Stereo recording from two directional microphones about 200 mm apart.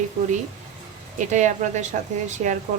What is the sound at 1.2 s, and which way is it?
Speech, 35° right (ahead or behind).